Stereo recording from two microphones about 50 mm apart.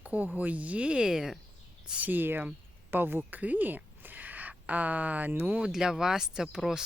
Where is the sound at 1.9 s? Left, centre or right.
Right.